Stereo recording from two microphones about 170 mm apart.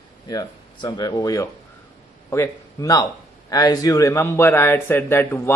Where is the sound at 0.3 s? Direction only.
20° left (ahead or behind).